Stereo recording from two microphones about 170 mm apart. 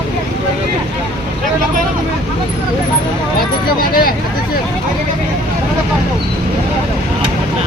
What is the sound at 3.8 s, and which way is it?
Vehicle, 60° left (ahead or behind).